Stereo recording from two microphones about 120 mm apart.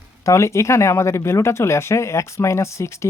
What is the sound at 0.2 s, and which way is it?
Speech, 25° left (ahead or behind).